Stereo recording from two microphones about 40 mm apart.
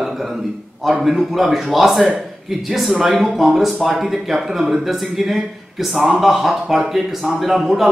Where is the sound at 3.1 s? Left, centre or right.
Right.